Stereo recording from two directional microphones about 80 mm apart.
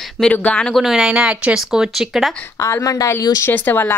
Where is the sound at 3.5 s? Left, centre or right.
Left.